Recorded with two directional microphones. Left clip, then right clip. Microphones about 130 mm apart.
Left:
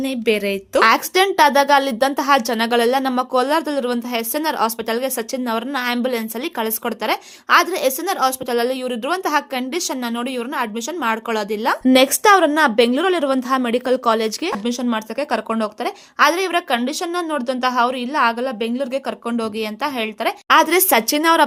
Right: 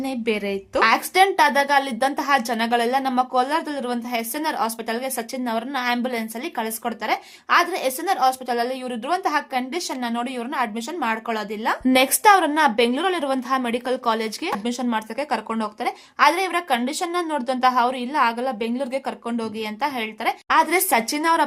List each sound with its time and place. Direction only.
0.0 s a woman's voice: 25° left (ahead or behind)
0.8 s speech: 35° left (ahead or behind)